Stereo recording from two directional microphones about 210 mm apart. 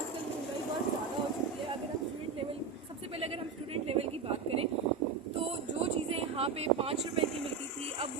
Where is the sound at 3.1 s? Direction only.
25° right (ahead or behind).